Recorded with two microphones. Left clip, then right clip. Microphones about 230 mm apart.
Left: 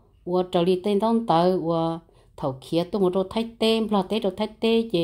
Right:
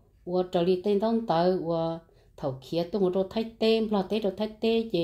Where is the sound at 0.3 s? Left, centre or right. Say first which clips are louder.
Left 4 dB; left.